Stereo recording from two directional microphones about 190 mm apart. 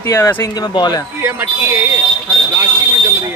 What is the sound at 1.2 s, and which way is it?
Speech, 10° right (ahead or behind).